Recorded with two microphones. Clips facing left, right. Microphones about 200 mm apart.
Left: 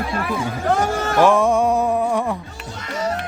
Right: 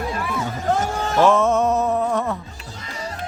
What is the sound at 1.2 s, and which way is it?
Music, 15° left (ahead or behind).